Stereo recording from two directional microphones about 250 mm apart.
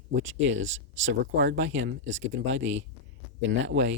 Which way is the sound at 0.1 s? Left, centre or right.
Right.